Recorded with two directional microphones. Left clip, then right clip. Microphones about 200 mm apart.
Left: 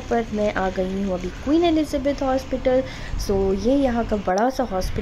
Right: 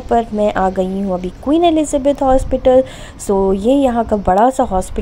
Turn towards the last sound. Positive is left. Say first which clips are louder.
# right 9 dB
turn(degrees=-10)  # may be behind; listen again after turning